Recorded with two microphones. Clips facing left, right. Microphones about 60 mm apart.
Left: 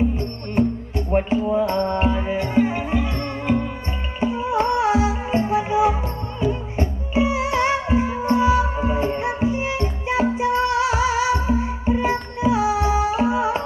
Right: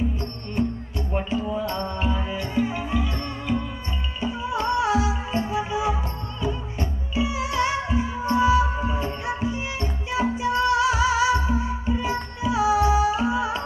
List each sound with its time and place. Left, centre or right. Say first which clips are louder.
0.9 s music: left 7 dB; left